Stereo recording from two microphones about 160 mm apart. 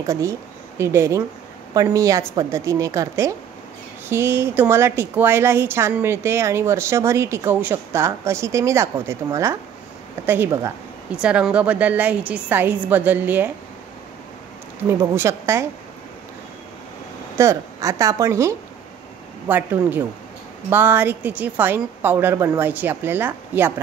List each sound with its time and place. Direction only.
0.0 s a woman's voice: 20° right (ahead or behind)
14.9 s a woman's voice: 15° right (ahead or behind)
17.4 s a woman's voice: 20° right (ahead or behind)